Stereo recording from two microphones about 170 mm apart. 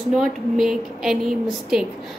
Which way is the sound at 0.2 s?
Centre (ahead or behind).